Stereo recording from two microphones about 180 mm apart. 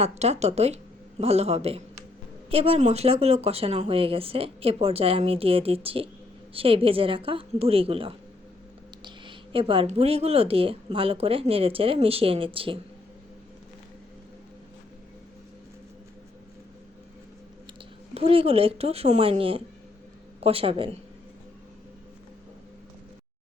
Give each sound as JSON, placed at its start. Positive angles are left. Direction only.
{"t": 0.0, "sound": "speech", "side_deg": -35}
{"t": 18.1, "sound": "speech", "side_deg": -35}